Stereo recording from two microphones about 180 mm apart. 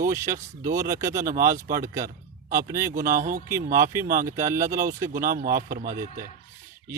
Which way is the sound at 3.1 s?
50° right (ahead or behind).